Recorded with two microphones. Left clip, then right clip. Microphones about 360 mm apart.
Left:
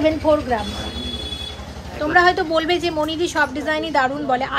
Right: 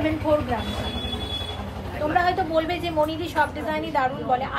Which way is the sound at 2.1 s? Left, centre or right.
Left.